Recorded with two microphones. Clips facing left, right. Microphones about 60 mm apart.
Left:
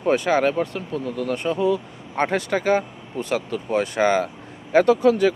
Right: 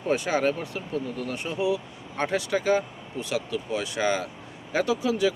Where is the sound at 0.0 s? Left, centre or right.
Left.